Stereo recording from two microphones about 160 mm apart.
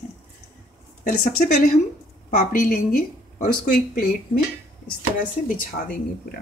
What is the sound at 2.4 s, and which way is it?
A woman's voice, 65° left (ahead or behind).